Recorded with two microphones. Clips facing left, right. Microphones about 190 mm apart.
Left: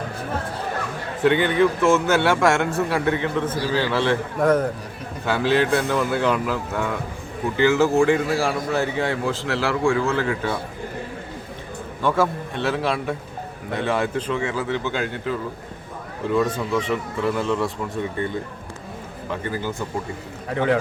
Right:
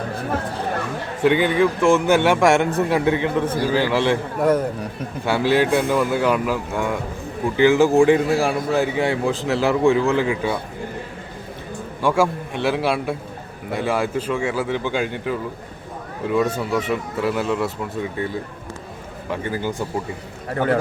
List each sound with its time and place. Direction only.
1.2 s speech: 10° right (ahead or behind)
12.0 s speech: 10° right (ahead or behind)
19.3 s speech: 10° right (ahead or behind)